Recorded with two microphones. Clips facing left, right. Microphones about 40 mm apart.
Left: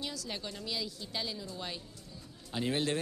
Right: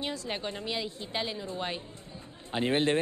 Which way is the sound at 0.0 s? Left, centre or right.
Right.